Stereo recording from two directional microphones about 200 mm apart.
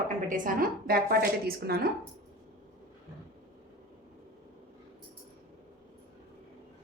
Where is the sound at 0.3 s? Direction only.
40° right (ahead or behind).